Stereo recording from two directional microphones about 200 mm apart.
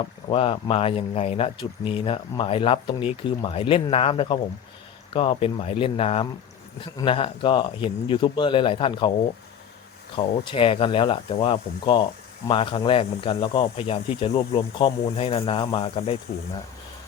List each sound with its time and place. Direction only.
0.3 s speech: 30° left (ahead or behind)
10.2 s speech: 25° left (ahead or behind)